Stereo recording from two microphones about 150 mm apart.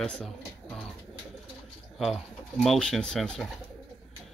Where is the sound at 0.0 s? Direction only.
5° left (ahead or behind).